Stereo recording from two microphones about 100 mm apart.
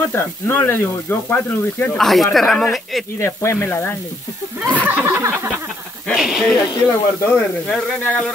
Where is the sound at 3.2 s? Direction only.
25° left (ahead or behind).